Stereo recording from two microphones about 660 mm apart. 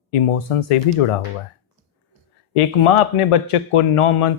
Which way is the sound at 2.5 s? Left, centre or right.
Left.